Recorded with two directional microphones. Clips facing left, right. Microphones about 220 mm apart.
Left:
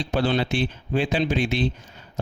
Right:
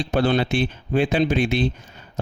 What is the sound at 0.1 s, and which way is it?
A man's voice, 55° right (ahead or behind).